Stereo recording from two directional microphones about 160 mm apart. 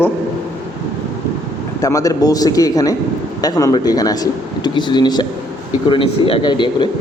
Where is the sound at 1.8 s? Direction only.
20° left (ahead or behind).